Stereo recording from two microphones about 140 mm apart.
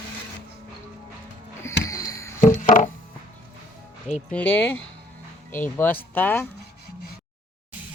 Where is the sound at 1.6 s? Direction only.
20° left (ahead or behind).